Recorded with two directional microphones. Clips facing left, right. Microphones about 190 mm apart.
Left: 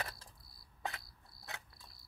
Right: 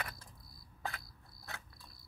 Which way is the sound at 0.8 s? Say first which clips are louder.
Even; 20° left (ahead or behind).